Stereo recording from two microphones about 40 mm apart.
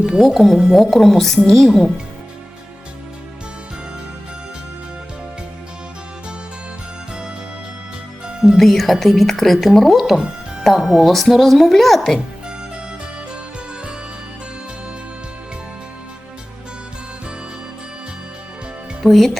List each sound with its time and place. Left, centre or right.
0.2 s a woman's voice: centre
8.3 s music: right
8.5 s speech: centre
19.0 s speech: centre